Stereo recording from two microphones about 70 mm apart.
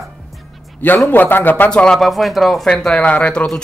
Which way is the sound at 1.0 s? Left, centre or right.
Left.